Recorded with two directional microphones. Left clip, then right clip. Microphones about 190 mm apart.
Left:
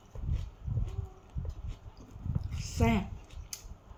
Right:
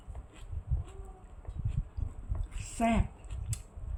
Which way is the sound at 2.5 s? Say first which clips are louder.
Right 1 dB; 15° right (ahead or behind).